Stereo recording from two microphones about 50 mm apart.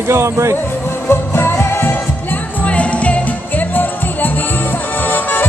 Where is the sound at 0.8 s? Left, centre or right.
Left.